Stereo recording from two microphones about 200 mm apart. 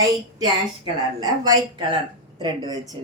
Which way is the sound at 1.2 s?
20° right (ahead or behind).